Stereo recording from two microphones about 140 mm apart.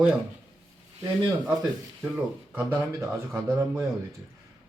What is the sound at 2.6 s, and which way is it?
Speech, 20° right (ahead or behind).